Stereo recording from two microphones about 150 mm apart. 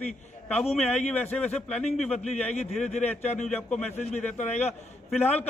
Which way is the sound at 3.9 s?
45° left (ahead or behind).